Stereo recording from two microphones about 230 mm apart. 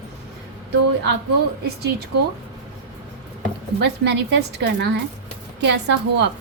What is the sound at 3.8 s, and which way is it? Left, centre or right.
A woman's voice, right.